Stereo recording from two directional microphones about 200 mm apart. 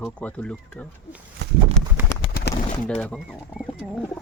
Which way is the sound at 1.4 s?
60° right (ahead or behind).